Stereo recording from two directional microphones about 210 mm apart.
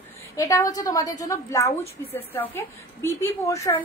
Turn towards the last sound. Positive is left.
turn(degrees=15)  # may be behind; listen again after turning